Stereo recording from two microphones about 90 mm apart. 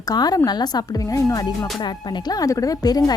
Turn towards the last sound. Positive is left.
turn(degrees=45)  # may be behind; listen again after turning